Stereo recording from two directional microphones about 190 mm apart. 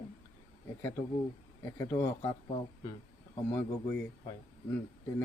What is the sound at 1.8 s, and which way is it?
Speech, 15° left (ahead or behind).